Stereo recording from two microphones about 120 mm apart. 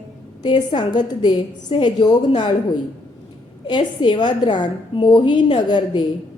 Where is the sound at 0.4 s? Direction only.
40° left (ahead or behind).